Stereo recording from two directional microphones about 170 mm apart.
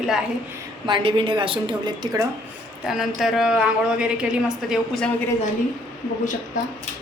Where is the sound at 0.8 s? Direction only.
30° right (ahead or behind).